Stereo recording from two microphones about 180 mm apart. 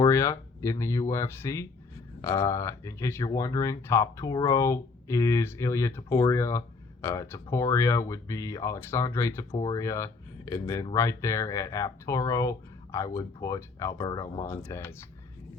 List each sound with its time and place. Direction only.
0.0 s speech: 15° left (ahead or behind)